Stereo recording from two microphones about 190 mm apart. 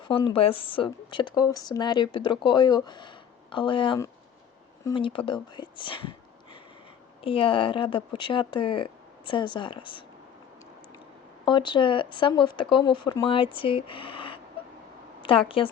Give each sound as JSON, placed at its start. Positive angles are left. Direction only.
{"t": 0.0, "sound": "speech", "side_deg": 25}
{"t": 11.4, "sound": "a woman's voice", "side_deg": 25}